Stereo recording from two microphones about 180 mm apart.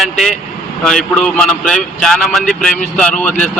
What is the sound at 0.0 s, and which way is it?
Speech, centre (ahead or behind).